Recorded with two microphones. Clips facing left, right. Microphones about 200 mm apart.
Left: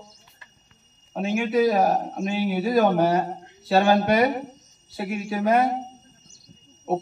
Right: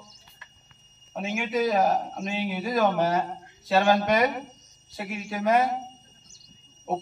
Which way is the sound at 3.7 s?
55° left (ahead or behind).